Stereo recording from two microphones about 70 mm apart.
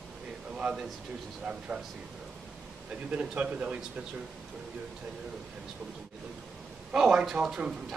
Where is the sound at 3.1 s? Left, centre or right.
Centre.